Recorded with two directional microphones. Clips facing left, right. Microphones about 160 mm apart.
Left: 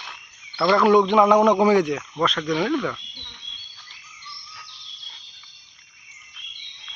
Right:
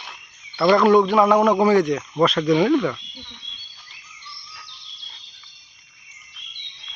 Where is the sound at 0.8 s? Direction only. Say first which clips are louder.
Left 2 dB; 15° left (ahead or behind).